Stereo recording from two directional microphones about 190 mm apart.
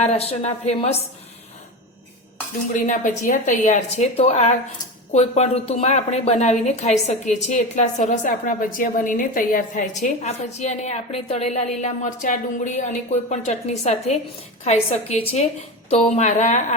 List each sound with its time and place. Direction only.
0.0 s a woman's voice: 35° left (ahead or behind)
2.7 s a woman's voice: 40° left (ahead or behind)